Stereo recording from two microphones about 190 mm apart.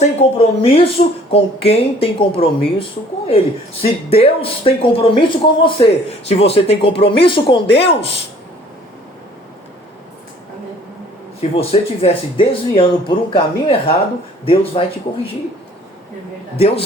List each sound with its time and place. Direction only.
0.0 s speech: 35° left (ahead or behind)
11.3 s speech: 30° left (ahead or behind)
16.6 s speech: 30° left (ahead or behind)